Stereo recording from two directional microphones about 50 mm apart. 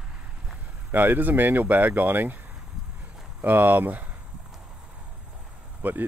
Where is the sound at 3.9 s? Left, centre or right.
Right.